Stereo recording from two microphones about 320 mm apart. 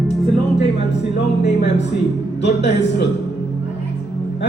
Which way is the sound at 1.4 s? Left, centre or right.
Left.